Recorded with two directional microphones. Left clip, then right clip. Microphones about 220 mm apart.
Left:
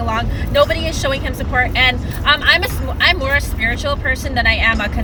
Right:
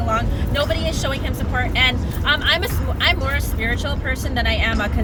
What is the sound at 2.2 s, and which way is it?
Speech, 15° left (ahead or behind).